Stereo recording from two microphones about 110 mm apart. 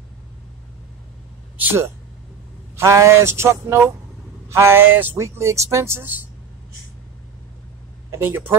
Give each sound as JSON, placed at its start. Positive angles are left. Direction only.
{"t": 1.6, "sound": "speech", "side_deg": -20}
{"t": 8.1, "sound": "speech", "side_deg": -20}